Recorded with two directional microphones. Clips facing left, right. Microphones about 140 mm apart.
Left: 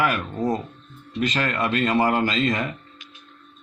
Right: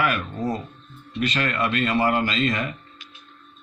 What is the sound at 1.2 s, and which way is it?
Speech, 35° left (ahead or behind).